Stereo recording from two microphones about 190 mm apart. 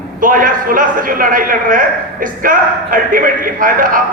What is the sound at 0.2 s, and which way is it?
A man's voice, 45° right (ahead or behind).